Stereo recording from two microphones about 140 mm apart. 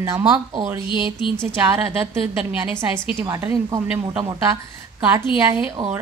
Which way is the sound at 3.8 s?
10° right (ahead or behind).